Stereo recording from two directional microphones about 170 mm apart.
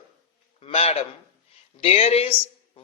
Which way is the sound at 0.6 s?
35° left (ahead or behind).